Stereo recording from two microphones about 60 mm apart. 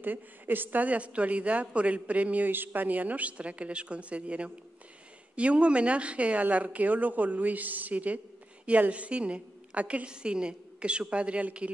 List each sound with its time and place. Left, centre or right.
0.0 s a woman's voice: right